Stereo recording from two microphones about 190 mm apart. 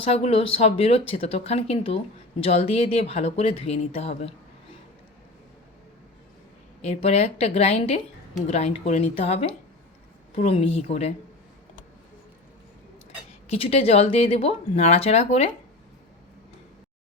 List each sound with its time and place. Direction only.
0.0 s speech: 30° left (ahead or behind)
6.8 s speech: 35° left (ahead or behind)
13.5 s speech: 30° left (ahead or behind)